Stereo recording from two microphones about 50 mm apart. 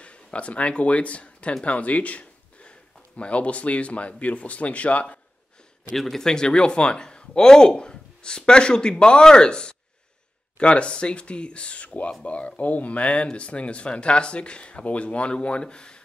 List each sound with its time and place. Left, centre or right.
0.0 s speech: left
5.9 s speech: centre